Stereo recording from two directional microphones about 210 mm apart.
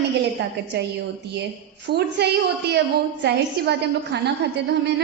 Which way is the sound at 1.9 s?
50° right (ahead or behind).